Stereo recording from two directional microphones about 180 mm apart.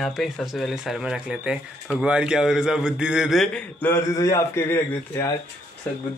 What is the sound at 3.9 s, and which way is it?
Speech, 20° left (ahead or behind).